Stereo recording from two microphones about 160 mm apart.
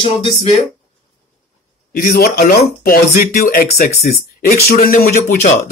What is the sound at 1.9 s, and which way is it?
Speech, 65° left (ahead or behind).